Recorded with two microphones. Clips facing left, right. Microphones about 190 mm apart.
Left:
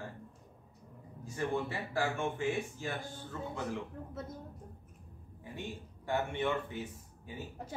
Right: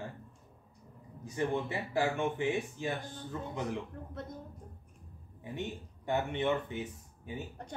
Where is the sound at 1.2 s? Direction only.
20° right (ahead or behind).